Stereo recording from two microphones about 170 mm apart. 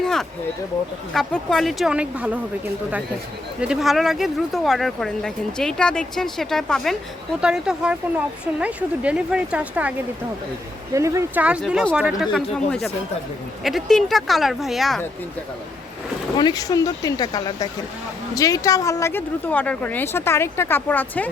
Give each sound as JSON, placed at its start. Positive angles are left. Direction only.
{"t": 0.0, "sound": "a sound", "side_deg": 5}
{"t": 1.1, "sound": "speech", "side_deg": 0}
{"t": 3.6, "sound": "speech", "side_deg": -5}
{"t": 10.9, "sound": "speech", "side_deg": -20}
{"t": 11.4, "sound": "speech", "side_deg": -5}
{"t": 16.4, "sound": "speech", "side_deg": 20}